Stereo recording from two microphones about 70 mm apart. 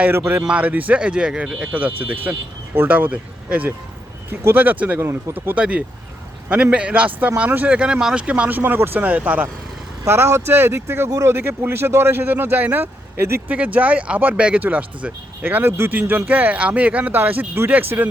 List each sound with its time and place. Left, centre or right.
0.4 s speech: centre
1.7 s speech: right
4.3 s speech: right
8.4 s speech: right
10.0 s speech: right
13.5 s speech: right